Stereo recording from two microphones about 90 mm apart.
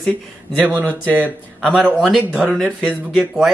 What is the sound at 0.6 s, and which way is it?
Speech, 15° right (ahead or behind).